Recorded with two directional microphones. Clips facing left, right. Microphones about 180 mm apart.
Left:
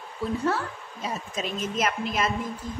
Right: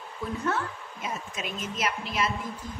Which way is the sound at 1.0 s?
35° left (ahead or behind).